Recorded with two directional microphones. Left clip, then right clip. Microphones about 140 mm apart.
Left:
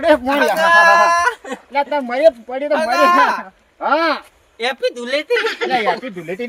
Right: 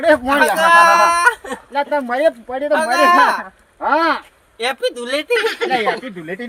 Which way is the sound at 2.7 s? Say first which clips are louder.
Right 1 dB; 25° right (ahead or behind).